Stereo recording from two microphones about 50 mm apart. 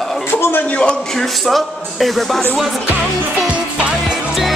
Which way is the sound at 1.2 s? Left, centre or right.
Centre.